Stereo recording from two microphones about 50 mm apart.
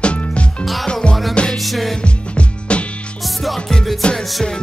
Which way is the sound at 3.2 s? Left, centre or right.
Centre.